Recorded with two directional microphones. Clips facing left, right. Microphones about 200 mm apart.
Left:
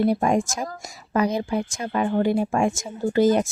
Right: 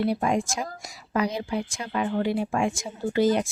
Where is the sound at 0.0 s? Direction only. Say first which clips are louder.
Left 4 dB; 45° left (ahead or behind).